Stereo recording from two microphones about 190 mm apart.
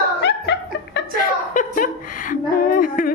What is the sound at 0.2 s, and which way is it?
Chuckle, 65° left (ahead or behind).